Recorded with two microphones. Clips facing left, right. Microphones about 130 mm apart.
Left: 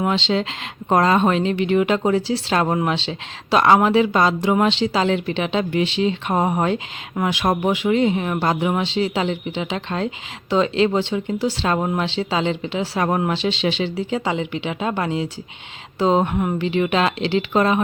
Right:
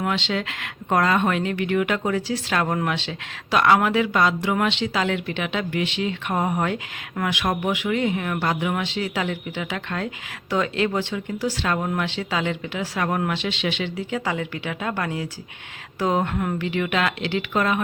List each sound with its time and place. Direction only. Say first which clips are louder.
0.0 s speech: left 5 dB; 30° left (ahead or behind)